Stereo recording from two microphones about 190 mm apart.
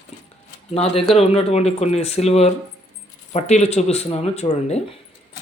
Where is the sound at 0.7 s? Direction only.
30° left (ahead or behind).